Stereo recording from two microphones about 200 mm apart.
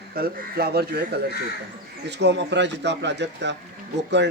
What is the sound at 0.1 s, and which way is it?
A man's voice, 50° right (ahead or behind).